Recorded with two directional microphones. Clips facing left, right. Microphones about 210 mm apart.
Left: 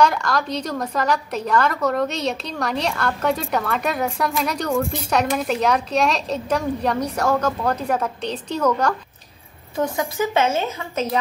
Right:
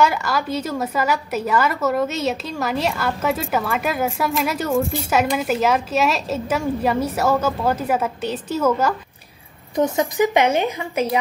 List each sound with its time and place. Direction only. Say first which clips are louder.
0.0 s a woman's voice: even; 5° right (ahead or behind)
9.8 s a woman's voice: right 4 dB; 20° right (ahead or behind)